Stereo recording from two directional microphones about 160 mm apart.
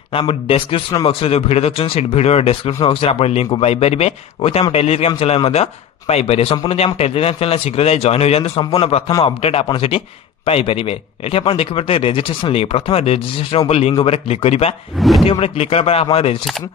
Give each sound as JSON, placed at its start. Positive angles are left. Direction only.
{"t": 0.1, "sound": "a man's voice", "side_deg": 35}
{"t": 15.0, "sound": "speech", "side_deg": 0}
{"t": 15.2, "sound": "a man's voice", "side_deg": 35}